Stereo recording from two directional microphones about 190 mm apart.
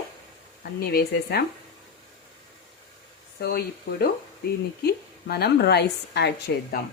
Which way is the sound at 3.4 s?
55° left (ahead or behind).